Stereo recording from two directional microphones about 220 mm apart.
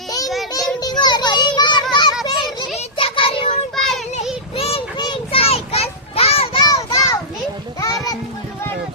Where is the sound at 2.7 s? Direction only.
30° left (ahead or behind).